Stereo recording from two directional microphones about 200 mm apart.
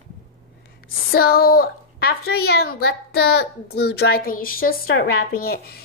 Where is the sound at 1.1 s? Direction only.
50° left (ahead or behind).